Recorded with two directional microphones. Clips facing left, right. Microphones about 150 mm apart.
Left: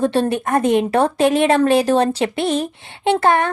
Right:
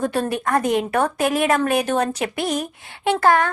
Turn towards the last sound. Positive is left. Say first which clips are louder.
# left 2 dB
turn(degrees=25)  # may be behind; listen again after turning